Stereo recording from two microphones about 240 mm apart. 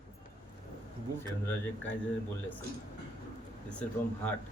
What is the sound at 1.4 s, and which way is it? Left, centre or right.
Speech, centre.